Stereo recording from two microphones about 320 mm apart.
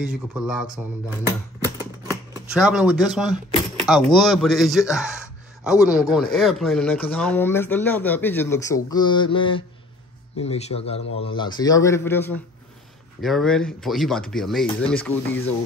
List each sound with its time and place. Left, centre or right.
0.0 s speech: centre
1.2 s shuffling cards: centre
3.8 s a man's voice: centre